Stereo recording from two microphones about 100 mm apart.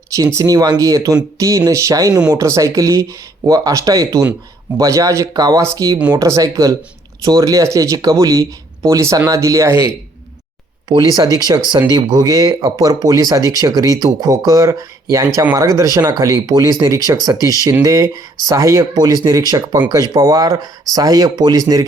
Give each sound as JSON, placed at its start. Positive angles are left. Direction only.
{"t": 0.1, "sound": "speech", "side_deg": -30}
{"t": 10.8, "sound": "speech", "side_deg": -45}
{"t": 18.9, "sound": "speech", "side_deg": -40}